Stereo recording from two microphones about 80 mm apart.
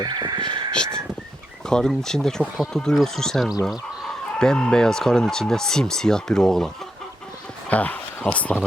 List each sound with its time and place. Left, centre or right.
0.0 s a sound: right
0.7 s crow: centre
1.6 s speech: centre
7.7 s speech: centre